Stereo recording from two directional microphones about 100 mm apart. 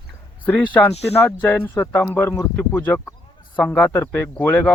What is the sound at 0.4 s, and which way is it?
Speech, 15° left (ahead or behind).